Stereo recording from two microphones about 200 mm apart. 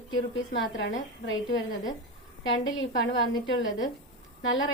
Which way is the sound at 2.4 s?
70° left (ahead or behind).